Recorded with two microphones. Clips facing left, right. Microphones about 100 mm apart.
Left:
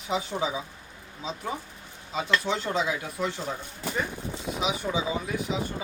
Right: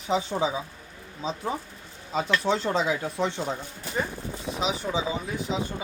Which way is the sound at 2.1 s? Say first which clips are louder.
Right 2 dB; 40° right (ahead or behind).